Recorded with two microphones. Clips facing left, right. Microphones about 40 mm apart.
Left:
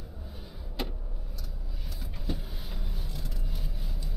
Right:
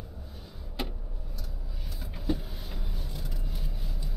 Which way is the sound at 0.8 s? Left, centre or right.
Centre.